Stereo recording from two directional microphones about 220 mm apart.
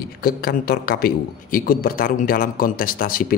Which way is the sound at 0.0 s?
40° left (ahead or behind).